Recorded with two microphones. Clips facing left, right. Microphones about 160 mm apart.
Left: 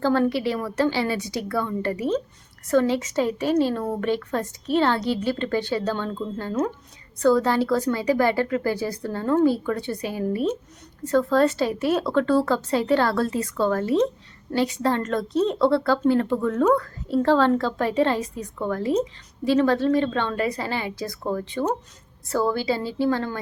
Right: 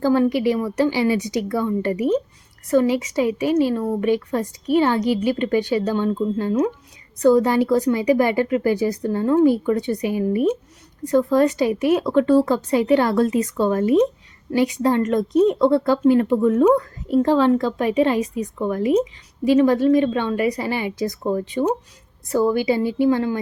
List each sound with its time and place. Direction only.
0.0 s speech: 15° right (ahead or behind)